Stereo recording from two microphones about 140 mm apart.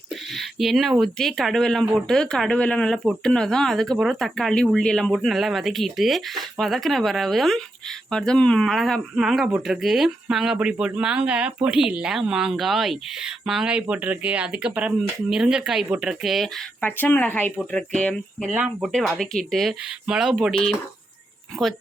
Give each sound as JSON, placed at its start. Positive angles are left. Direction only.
{"t": 0.3, "sound": "speech", "side_deg": 0}
{"t": 16.8, "sound": "speech", "side_deg": 15}
{"t": 18.5, "sound": "speech", "side_deg": -10}
{"t": 18.9, "sound": "speech", "side_deg": 5}